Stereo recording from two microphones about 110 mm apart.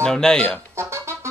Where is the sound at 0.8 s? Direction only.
25° right (ahead or behind).